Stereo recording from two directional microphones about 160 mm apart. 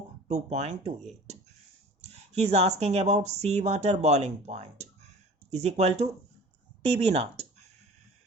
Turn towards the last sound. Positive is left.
turn(degrees=-40)  # may be behind; listen again after turning